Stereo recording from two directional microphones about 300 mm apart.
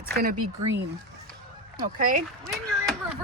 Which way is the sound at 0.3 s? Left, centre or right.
Right.